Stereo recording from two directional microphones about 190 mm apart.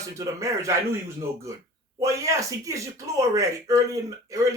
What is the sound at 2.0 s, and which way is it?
Speech, 15° right (ahead or behind).